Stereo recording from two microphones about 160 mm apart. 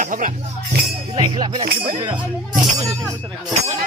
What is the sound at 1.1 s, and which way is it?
Speech, 25° right (ahead or behind).